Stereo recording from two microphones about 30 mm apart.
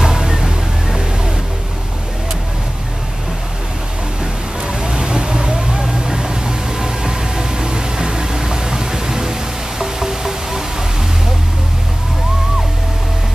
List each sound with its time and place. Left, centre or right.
0.0 s music: centre
4.2 s a sound: right
5.5 s vehicle: right